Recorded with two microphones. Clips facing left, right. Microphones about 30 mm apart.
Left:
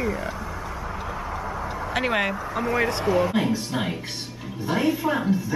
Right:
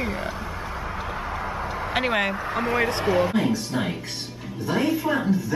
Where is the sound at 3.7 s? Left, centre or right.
Centre.